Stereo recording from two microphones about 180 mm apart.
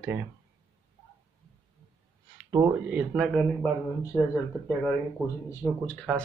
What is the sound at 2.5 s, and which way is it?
Speech, 20° right (ahead or behind).